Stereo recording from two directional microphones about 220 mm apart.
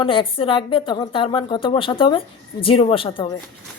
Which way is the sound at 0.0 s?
25° left (ahead or behind).